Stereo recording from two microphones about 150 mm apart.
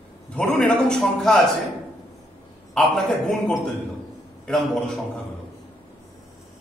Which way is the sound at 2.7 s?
5° left (ahead or behind).